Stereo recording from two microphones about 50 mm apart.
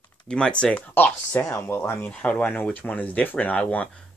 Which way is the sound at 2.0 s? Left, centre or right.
Left.